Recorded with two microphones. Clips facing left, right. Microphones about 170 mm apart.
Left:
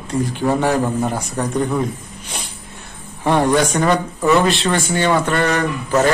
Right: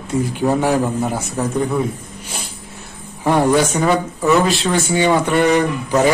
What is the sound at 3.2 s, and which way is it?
Speech, 5° right (ahead or behind).